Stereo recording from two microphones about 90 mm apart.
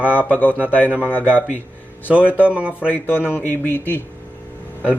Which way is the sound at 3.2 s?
25° left (ahead or behind).